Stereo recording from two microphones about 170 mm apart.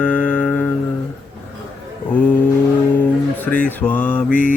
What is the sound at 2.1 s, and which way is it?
Mantra, 10° left (ahead or behind).